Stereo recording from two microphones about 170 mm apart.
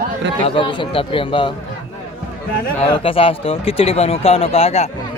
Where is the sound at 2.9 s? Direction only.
30° left (ahead or behind).